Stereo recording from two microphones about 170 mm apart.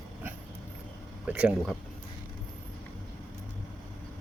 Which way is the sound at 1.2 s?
10° right (ahead or behind).